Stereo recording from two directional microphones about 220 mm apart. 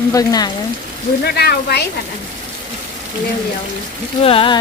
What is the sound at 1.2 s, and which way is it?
Speech, 45° left (ahead or behind).